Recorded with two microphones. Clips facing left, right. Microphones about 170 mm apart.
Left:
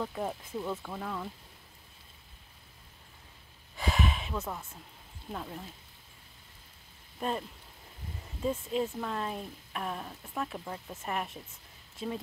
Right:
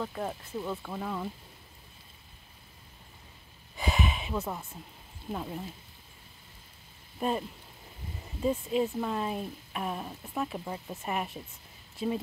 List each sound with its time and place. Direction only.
0.0 s speech: centre (ahead or behind)
3.7 s a sound: centre (ahead or behind)
5.3 s speech: 5° right (ahead or behind)
7.2 s speech: 5° right (ahead or behind)